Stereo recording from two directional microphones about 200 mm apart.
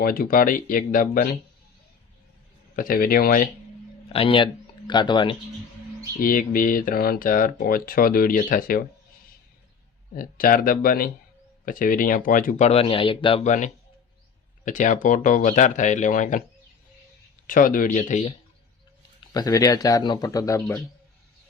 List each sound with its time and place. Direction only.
0.0 s speech: 45° left (ahead or behind)
2.7 s speech: 45° left (ahead or behind)
4.1 s speech: 25° left (ahead or behind)
6.1 s speech: 45° left (ahead or behind)
10.2 s speech: 45° left (ahead or behind)
17.4 s speech: 45° left (ahead or behind)
19.3 s speech: 20° left (ahead or behind)